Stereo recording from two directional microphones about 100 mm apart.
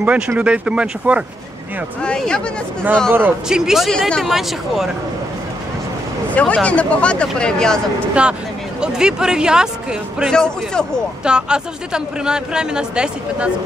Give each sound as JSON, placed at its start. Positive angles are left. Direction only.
{"t": 0.0, "sound": "speech", "side_deg": -15}
{"t": 2.0, "sound": "speech", "side_deg": 10}
{"t": 3.1, "sound": "a man's voice", "side_deg": -20}
{"t": 3.4, "sound": "speech", "side_deg": -5}
{"t": 6.3, "sound": "speech", "side_deg": 10}
{"t": 8.1, "sound": "speech", "side_deg": -10}
{"t": 10.3, "sound": "speech", "side_deg": 5}
{"t": 11.2, "sound": "speech", "side_deg": -10}